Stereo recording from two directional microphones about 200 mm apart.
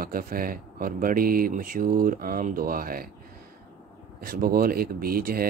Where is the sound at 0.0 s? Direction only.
45° right (ahead or behind).